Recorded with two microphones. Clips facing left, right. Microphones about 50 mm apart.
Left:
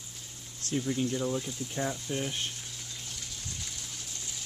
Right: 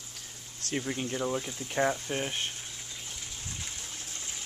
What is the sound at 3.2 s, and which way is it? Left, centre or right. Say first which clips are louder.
Gush: right 1 dB; right.